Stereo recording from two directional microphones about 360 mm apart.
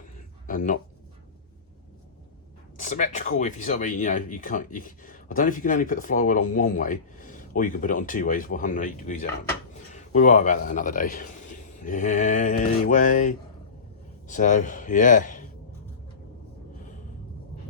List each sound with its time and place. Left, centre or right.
0.4 s speech: left
2.7 s a man's voice: left